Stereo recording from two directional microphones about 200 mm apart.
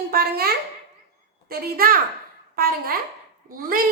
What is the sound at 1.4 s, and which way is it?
A child's voice, 50° right (ahead or behind).